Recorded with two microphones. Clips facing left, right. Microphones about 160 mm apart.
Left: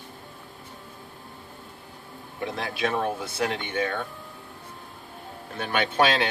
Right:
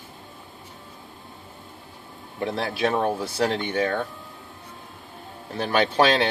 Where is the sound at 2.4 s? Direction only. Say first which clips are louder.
Right 4 dB; 30° right (ahead or behind).